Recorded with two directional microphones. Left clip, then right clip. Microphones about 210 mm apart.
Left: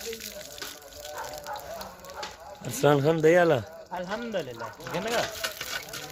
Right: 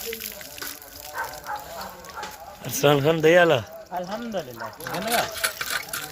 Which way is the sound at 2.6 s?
5° left (ahead or behind).